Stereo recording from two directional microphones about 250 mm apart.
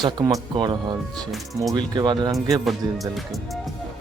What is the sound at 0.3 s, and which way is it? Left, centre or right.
Speech, centre.